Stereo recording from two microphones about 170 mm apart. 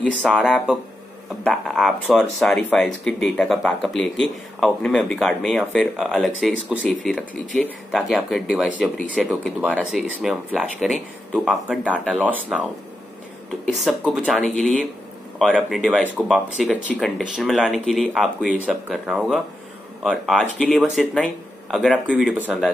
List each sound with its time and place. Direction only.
0.2 s speech: centre (ahead or behind)
13.7 s speech: centre (ahead or behind)
16.1 s speech: 10° right (ahead or behind)
16.6 s speech: centre (ahead or behind)